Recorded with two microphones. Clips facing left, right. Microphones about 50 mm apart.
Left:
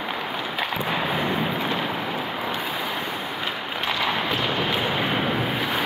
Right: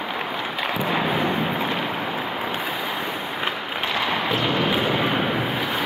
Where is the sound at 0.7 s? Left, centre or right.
Centre.